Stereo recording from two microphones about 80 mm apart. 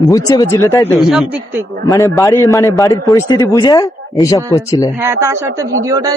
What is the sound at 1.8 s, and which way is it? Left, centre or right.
Speech, left.